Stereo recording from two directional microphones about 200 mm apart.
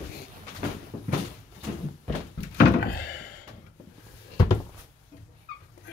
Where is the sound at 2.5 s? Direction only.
55° left (ahead or behind).